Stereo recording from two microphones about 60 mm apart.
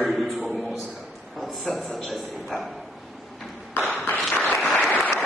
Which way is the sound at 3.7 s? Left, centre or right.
Left.